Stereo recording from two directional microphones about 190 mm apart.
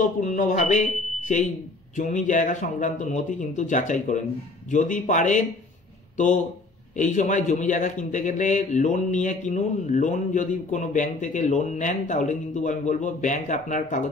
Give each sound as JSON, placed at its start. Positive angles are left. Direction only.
{"t": 0.0, "sound": "a man's voice", "side_deg": 40}